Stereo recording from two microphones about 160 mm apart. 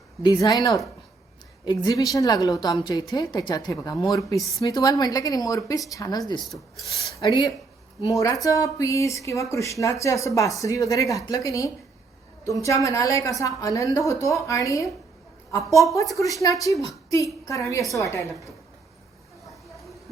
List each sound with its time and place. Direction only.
0.2 s speech: 25° left (ahead or behind)
6.4 s rub: centre (ahead or behind)
7.2 s speech: 25° left (ahead or behind)